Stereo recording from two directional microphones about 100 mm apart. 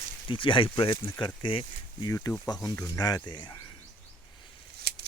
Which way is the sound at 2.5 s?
40° left (ahead or behind).